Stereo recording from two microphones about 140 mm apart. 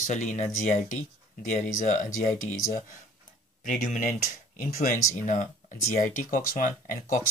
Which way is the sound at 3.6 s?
65° left (ahead or behind).